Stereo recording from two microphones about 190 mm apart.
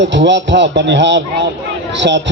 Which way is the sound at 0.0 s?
70° right (ahead or behind).